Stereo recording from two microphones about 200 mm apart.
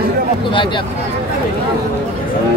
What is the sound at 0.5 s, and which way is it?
Speech, 25° left (ahead or behind).